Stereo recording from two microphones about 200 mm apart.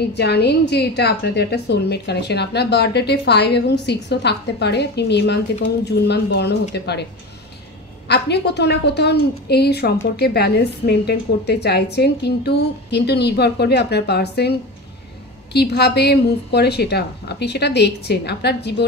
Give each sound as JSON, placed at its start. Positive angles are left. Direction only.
{"t": 0.1, "sound": "a woman's voice", "side_deg": 55}
{"t": 8.1, "sound": "a woman's voice", "side_deg": 55}
{"t": 15.5, "sound": "a woman's voice", "side_deg": 55}